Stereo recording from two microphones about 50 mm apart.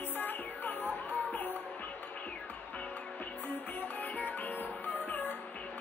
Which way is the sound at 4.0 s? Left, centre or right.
Left.